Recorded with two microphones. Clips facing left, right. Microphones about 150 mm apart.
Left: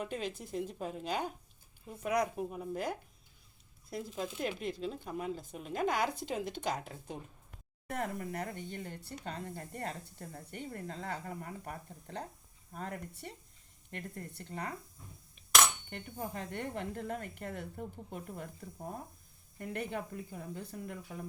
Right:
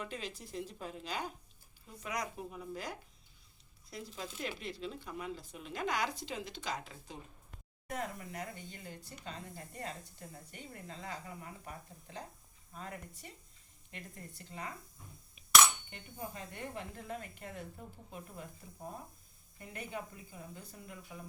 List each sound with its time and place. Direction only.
0.0 s speech: 50° left (ahead or behind)
15.9 s speech: 55° left (ahead or behind)
19.5 s speech: 55° left (ahead or behind)